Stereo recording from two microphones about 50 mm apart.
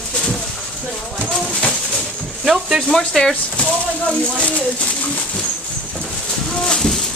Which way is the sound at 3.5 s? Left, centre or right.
Left.